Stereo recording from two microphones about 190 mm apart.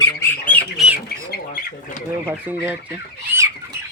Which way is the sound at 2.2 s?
10° right (ahead or behind).